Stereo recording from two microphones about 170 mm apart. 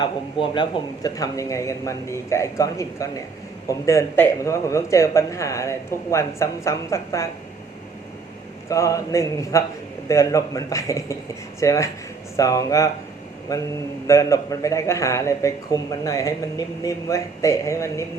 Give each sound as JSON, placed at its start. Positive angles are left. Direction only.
{"t": 0.0, "sound": "speech", "side_deg": 30}
{"t": 8.7, "sound": "speech", "side_deg": 20}